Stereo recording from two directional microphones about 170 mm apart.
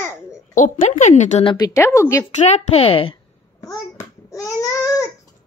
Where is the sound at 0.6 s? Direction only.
50° left (ahead or behind).